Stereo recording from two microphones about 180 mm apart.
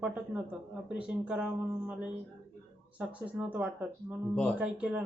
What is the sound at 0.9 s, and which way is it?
Speech, 5° right (ahead or behind).